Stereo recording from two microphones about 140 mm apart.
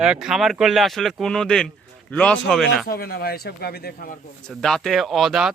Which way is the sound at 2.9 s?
90° left.